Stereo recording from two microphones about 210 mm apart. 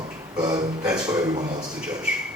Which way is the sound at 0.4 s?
20° right (ahead or behind).